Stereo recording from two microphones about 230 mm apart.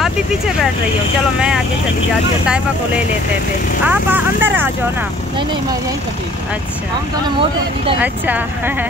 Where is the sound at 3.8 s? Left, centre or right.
Centre.